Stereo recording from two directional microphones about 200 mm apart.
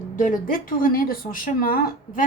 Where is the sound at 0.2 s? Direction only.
45° left (ahead or behind).